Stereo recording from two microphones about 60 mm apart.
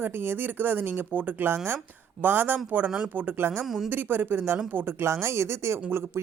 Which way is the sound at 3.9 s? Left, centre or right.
Right.